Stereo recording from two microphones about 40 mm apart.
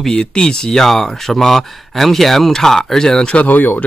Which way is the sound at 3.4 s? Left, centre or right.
Left.